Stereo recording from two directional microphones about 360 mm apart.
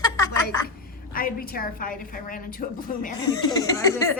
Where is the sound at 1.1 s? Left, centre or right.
Left.